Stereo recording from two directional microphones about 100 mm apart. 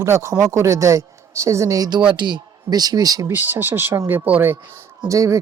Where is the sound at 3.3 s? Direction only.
20° right (ahead or behind).